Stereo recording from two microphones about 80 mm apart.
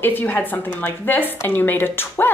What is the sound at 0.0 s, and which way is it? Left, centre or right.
Speech, left.